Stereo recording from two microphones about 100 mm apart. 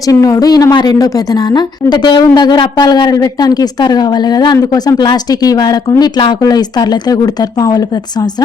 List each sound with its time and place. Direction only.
0.1 s a woman's voice: 35° left (ahead or behind)